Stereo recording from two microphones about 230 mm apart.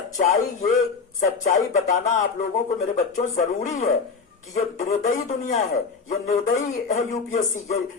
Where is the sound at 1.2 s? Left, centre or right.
Left.